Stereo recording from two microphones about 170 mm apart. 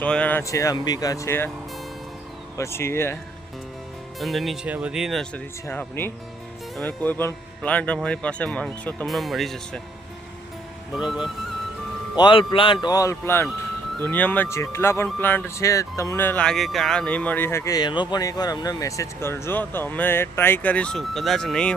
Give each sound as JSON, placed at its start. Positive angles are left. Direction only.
{"t": 0.0, "sound": "speech", "side_deg": 5}
{"t": 2.6, "sound": "speech", "side_deg": 15}
{"t": 4.2, "sound": "speech", "side_deg": 0}
{"t": 5.6, "sound": "speech", "side_deg": 10}
{"t": 10.9, "sound": "speech", "side_deg": 0}
{"t": 12.1, "sound": "a man's voice", "side_deg": 30}